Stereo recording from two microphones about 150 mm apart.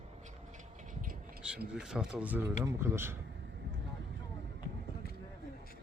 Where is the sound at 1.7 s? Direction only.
5° right (ahead or behind).